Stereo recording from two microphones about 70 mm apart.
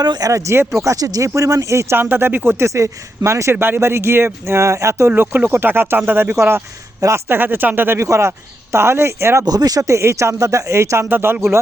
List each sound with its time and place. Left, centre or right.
0.0 s speech: right
0.3 s speech: right
2.0 s speech: right
3.5 s speech: right
5.1 s speech: right
7.9 s speech: right
9.5 s speech: right
11.1 s speech: right